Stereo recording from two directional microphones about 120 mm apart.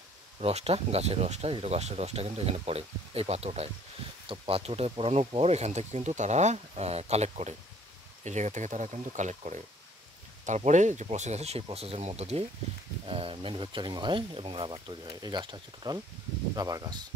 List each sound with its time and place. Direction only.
0.4 s speech: 60° right (ahead or behind)
8.2 s speech: 85° right; by 17.0 s 30° right (ahead or behind)